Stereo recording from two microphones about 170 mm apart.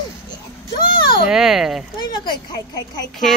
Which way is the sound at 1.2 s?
Centre (ahead or behind).